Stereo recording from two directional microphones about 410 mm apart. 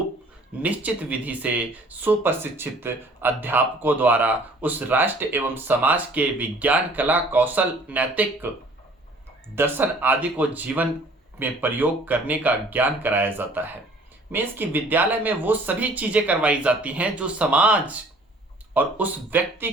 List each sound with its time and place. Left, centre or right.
0.6 s speech: centre
9.6 s speech: centre